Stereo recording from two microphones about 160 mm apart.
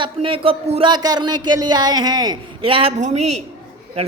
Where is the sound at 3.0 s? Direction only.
45° right (ahead or behind).